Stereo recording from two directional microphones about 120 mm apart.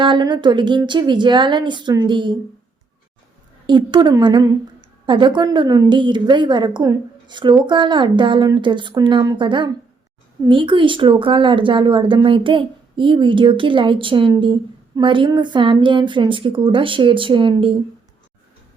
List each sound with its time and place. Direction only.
0.0 s a woman's voice: 40° right (ahead or behind)
3.7 s a woman's voice: 40° right (ahead or behind)